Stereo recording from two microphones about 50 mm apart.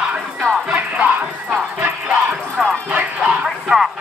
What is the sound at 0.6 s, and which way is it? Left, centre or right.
Music, right.